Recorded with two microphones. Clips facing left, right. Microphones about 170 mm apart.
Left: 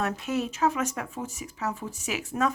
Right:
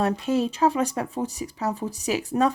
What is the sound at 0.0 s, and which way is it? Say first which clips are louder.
Speech: right 6 dB; 30° right (ahead or behind).